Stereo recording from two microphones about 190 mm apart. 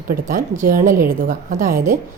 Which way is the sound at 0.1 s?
45° right (ahead or behind).